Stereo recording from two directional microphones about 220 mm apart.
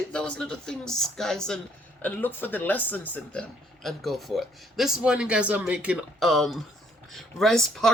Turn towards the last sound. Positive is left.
turn(degrees=0)  # may be behind; listen again after turning